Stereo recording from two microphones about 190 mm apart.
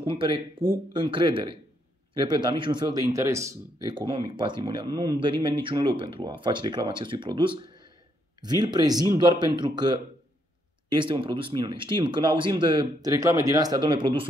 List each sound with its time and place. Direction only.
0.0 s speech: 25° right (ahead or behind)